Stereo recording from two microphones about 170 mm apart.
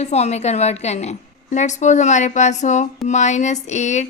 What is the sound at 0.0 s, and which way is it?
A woman's voice, 40° left (ahead or behind).